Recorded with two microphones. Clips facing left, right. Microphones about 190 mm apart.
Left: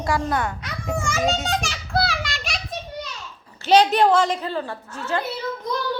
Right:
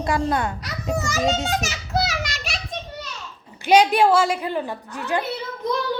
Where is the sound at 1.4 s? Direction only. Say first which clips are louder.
Even; 5° right (ahead or behind).